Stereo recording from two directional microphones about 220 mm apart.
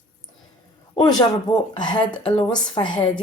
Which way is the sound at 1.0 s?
15° left (ahead or behind).